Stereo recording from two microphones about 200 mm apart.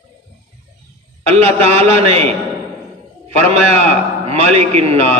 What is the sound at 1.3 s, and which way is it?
Speech, 30° right (ahead or behind).